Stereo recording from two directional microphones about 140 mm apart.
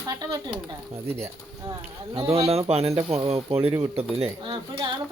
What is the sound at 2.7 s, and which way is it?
Speech, 45° right (ahead or behind).